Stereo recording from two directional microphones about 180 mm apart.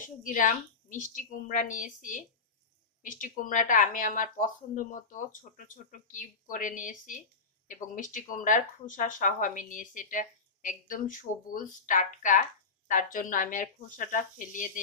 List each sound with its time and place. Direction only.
0.0 s speech: 45° left (ahead or behind)